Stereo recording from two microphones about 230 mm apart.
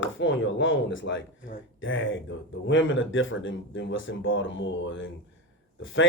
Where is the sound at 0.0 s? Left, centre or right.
Left.